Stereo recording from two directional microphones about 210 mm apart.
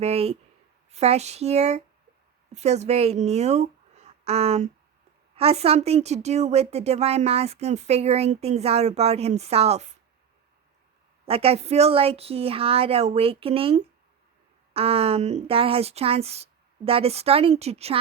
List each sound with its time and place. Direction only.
0.0 s a woman's voice: 30° right (ahead or behind)
11.3 s a woman's voice: 30° right (ahead or behind)